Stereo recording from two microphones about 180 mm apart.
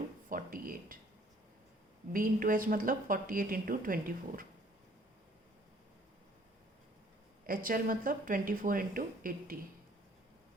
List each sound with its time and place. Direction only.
0.3 s a sound: 50° right (ahead or behind)
2.1 s a woman's voice: 50° right (ahead or behind)
7.4 s a woman's voice: 50° right (ahead or behind)